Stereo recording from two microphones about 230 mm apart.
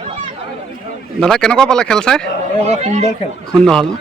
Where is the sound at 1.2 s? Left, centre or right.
Centre.